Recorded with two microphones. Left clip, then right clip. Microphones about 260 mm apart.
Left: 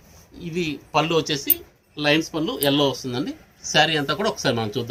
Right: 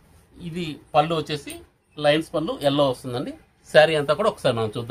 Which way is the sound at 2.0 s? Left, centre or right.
Right.